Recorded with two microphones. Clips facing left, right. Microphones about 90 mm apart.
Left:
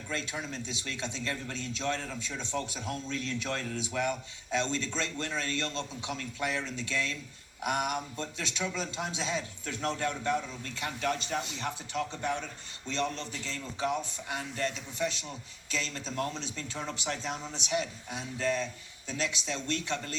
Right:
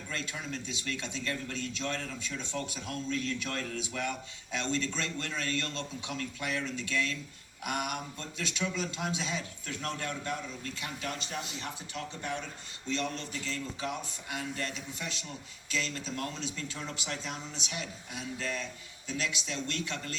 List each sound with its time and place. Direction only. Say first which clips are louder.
0.1 s a man's voice: left 2 dB; 25° left (ahead or behind)